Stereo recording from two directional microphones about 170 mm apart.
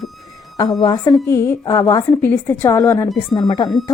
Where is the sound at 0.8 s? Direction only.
25° left (ahead or behind).